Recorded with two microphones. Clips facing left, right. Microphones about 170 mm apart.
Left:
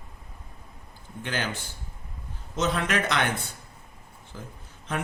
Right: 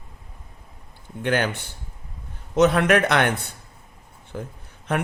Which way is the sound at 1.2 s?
60° right (ahead or behind).